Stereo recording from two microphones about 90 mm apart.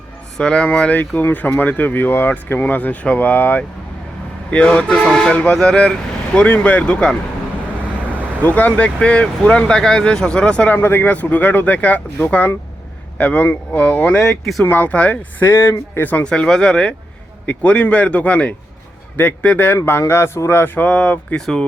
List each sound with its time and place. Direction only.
0.3 s speech: 10° left (ahead or behind)
8.4 s speech: 20° left (ahead or behind)
10.8 s speech: 25° left (ahead or behind)